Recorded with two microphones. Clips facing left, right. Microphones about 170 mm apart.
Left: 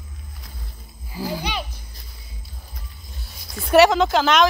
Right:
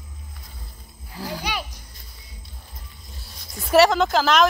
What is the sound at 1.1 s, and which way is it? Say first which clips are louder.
Speech: left 4 dB; 5° left (ahead or behind).